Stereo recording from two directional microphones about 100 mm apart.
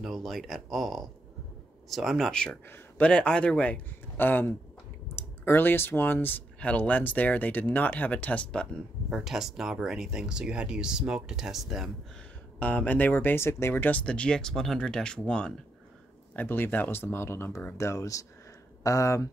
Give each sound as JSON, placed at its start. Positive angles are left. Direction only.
{"t": 0.0, "sound": "speech", "side_deg": 0}
{"t": 9.1, "sound": "speech", "side_deg": -5}
{"t": 12.5, "sound": "speech", "side_deg": 15}
{"t": 16.3, "sound": "speech", "side_deg": 20}